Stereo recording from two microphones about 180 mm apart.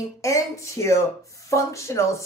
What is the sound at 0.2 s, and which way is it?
Speech, 15° left (ahead or behind).